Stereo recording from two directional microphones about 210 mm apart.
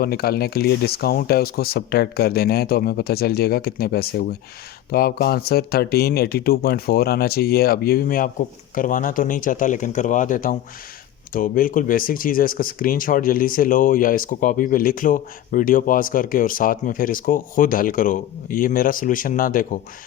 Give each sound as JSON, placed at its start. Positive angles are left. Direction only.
{"t": 0.0, "sound": "speech", "side_deg": 45}